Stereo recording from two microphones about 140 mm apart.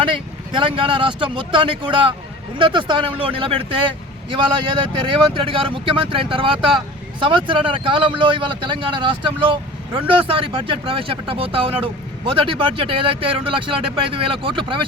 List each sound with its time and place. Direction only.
0.5 s speech: 35° right (ahead or behind)